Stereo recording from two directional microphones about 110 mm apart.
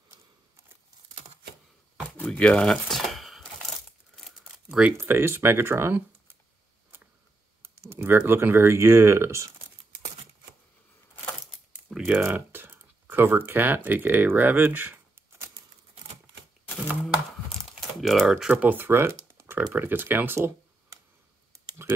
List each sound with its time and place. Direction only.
2.1 s a sound: 10° left (ahead or behind)
4.1 s crumpling: 5° right (ahead or behind)
4.9 s speech: 20° right (ahead or behind)
7.6 s computer keyboard: 25° right (ahead or behind)
8.2 s speech: 20° right (ahead or behind)
11.9 s a sound: centre (ahead or behind)
12.2 s speech: 20° right (ahead or behind)
17.6 s typing: centre (ahead or behind)
18.5 s speech: 15° right (ahead or behind)